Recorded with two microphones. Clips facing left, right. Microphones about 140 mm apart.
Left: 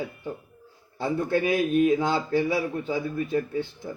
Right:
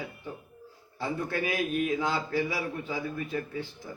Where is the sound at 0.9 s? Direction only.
25° left (ahead or behind).